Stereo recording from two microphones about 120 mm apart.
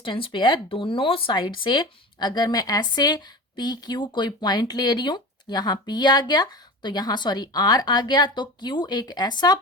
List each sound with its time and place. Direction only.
0.0 s speech: 45° left (ahead or behind)